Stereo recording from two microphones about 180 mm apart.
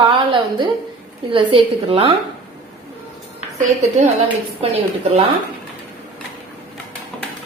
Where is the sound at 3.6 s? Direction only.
40° right (ahead or behind).